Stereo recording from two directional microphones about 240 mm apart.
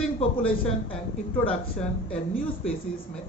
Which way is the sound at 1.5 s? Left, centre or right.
Centre.